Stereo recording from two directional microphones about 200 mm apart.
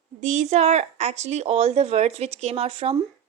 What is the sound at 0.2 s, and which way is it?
Speech, 35° right (ahead or behind).